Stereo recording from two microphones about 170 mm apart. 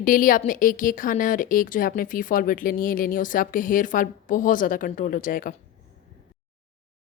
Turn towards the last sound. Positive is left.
turn(degrees=55)  # may be behind; listen again after turning